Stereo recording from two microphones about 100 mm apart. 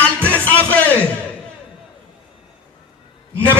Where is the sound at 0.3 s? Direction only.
15° left (ahead or behind).